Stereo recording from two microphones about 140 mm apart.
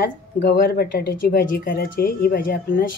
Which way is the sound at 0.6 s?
90° left.